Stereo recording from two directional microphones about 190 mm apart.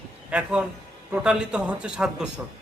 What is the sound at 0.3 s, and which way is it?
A man's voice, 5° right (ahead or behind).